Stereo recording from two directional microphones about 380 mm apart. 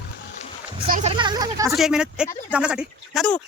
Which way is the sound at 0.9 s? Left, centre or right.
Centre.